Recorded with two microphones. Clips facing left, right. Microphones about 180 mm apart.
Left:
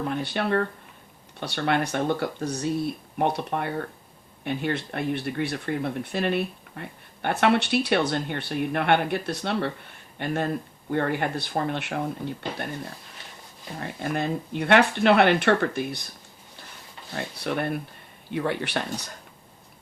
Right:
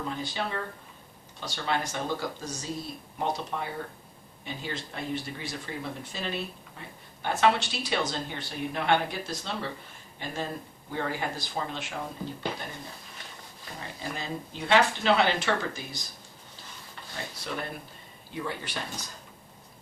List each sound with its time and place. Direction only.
0.1 s speech: 60° left (ahead or behind)
13.7 s speech: 60° left (ahead or behind)
17.2 s speech: 60° left (ahead or behind)